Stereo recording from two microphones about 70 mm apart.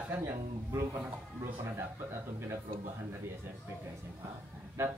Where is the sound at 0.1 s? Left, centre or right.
Right.